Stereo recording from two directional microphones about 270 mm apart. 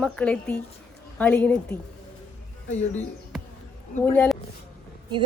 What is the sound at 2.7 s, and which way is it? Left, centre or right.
Speech, left.